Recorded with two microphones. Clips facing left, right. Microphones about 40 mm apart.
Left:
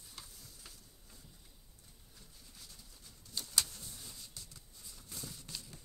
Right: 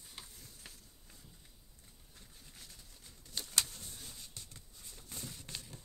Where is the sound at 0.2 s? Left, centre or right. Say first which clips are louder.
Right 1 dB; right.